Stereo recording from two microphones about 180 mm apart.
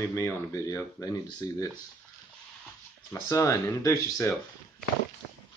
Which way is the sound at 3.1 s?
15° left (ahead or behind).